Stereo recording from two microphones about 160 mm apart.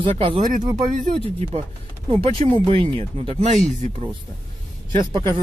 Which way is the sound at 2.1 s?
35° right (ahead or behind).